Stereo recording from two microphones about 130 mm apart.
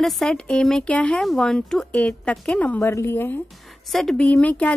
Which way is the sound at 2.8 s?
20° left (ahead or behind).